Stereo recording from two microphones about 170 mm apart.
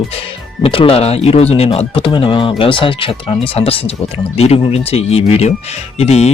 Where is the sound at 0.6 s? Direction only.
35° left (ahead or behind).